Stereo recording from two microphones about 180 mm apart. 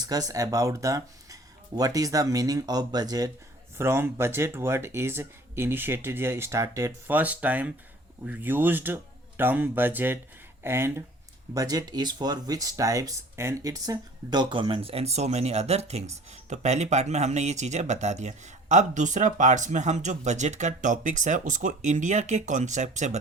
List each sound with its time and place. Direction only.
0.0 s speech: 20° right (ahead or behind); by 23.1 s 40° right (ahead or behind)